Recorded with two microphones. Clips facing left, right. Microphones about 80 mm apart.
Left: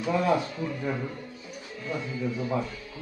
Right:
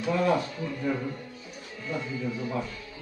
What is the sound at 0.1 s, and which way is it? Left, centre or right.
Speech, centre.